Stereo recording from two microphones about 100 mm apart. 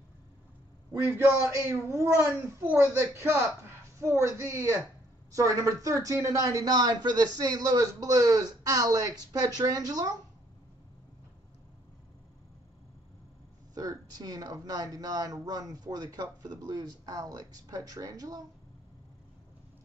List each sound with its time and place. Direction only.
0.9 s a child's voice: 20° right (ahead or behind)
1.9 s a child's voice: 30° right (ahead or behind)
13.7 s speech: 40° right (ahead or behind)